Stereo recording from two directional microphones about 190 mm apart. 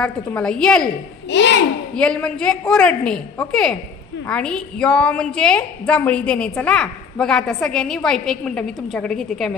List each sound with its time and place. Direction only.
0.0 s a woman's voice: 5° left (ahead or behind)
1.3 s a child's voice: 70° left (ahead or behind)
2.0 s a woman's voice: 5° left (ahead or behind)